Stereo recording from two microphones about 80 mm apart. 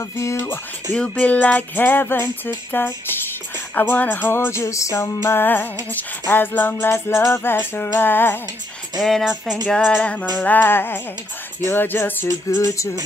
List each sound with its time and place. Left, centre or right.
0.2 s music: left
0.9 s music: centre
9.2 s music: centre
9.8 s music: centre
12.3 s music: left